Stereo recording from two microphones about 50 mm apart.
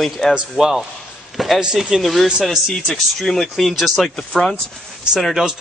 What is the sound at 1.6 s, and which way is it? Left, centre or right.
Speech, centre.